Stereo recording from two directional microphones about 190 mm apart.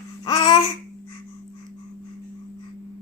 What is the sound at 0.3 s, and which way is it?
Babbling, 25° left (ahead or behind).